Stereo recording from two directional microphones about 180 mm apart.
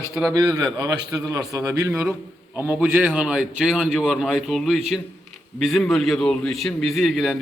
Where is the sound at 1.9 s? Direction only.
5° right (ahead or behind).